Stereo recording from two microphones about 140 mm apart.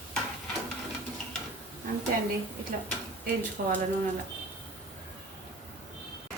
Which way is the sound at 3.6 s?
90° right.